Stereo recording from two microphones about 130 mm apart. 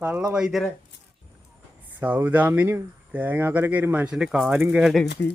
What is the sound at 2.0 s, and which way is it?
Speech, 15° right (ahead or behind).